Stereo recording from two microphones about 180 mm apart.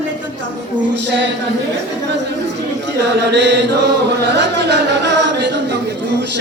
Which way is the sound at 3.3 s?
70° right (ahead or behind).